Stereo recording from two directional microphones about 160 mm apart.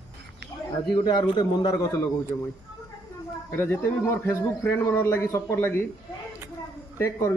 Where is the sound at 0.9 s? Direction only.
30° left (ahead or behind).